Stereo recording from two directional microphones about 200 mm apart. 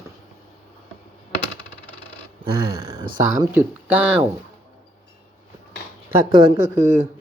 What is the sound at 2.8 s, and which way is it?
Speech, 15° right (ahead or behind).